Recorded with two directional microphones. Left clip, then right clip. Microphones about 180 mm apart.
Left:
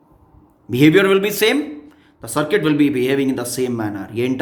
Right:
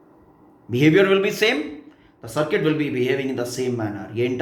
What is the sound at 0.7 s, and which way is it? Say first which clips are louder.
Speech: left 3 dB; 60° left (ahead or behind).